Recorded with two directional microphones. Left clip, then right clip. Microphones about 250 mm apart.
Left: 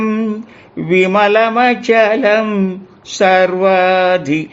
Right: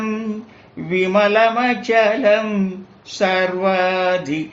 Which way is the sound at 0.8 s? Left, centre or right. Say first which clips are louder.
Left 5 dB; left.